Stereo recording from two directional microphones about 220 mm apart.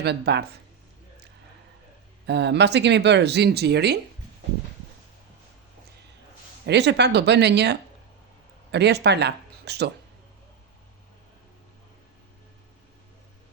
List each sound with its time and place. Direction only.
0.0 s speech: 50° right (ahead or behind)
2.2 s speech: 50° right (ahead or behind)
6.7 s speech: 50° right (ahead or behind)